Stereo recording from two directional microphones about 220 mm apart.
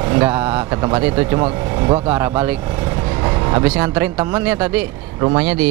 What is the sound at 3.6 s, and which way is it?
Speech, 10° right (ahead or behind).